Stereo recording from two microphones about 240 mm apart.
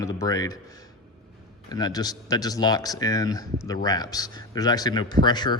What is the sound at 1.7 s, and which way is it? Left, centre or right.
Speech, centre.